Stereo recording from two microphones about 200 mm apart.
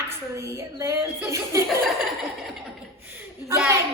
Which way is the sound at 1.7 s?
Centre (ahead or behind).